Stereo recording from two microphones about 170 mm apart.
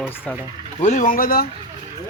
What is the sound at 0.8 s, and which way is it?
Speech, 45° left (ahead or behind).